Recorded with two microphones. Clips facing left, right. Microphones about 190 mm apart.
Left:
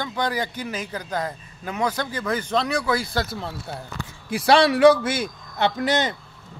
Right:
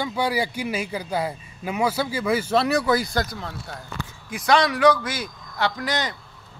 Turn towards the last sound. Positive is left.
turn(degrees=25)  # may be behind; listen again after turning